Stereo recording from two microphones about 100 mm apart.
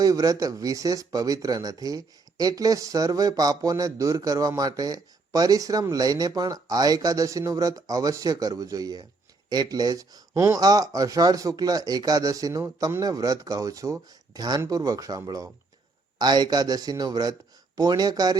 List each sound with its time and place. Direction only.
0.0 s speech: 35° right (ahead or behind)